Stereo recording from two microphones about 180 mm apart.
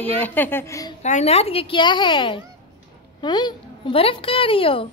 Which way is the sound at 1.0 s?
40° left (ahead or behind).